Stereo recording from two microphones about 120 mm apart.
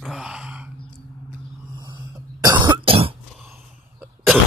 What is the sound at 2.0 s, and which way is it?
Cough, 35° right (ahead or behind).